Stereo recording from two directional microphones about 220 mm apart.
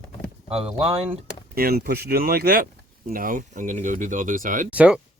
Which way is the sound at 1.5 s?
45° right (ahead or behind).